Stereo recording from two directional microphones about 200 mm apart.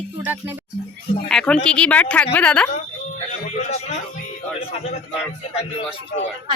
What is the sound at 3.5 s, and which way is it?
Speech, 35° left (ahead or behind).